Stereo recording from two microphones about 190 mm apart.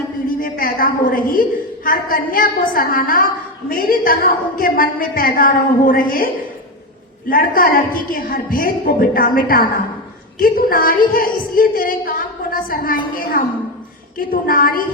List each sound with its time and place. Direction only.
0.3 s a woman's voice: 45° left (ahead or behind)